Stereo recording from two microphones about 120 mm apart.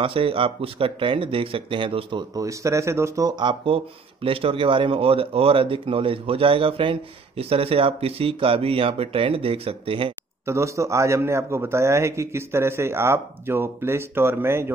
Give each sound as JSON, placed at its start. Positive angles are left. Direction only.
{"t": 0.0, "sound": "speech", "side_deg": -50}
{"t": 2.3, "sound": "a man's voice", "side_deg": -25}
{"t": 3.3, "sound": "speech", "side_deg": -40}
{"t": 10.4, "sound": "a man's voice", "side_deg": -25}